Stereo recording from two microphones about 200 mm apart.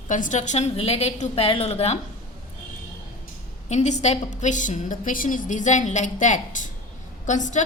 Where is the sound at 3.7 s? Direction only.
35° left (ahead or behind).